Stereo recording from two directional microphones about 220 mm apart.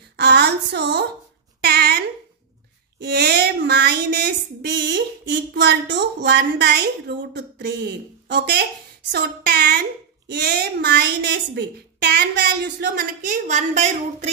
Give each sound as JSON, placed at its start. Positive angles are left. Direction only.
{"t": 0.2, "sound": "a sound", "side_deg": -50}
{"t": 8.3, "sound": "a woman's voice", "side_deg": -45}
{"t": 13.3, "sound": "a woman's voice", "side_deg": -35}